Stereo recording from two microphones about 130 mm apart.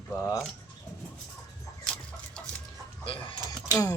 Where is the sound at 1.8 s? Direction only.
5° left (ahead or behind).